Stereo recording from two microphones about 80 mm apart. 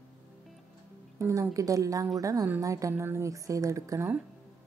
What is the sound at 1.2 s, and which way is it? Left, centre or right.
Speech, right.